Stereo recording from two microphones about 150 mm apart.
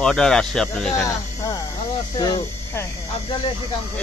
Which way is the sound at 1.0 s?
20° left (ahead or behind).